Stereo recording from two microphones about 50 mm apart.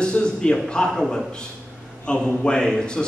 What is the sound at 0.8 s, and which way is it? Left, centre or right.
A man's voice, centre.